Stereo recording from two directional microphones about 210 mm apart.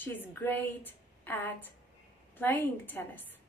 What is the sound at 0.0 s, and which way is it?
A woman's voice, 10° left (ahead or behind).